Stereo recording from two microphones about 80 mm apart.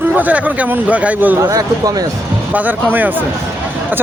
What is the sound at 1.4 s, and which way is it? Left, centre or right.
Speech, right.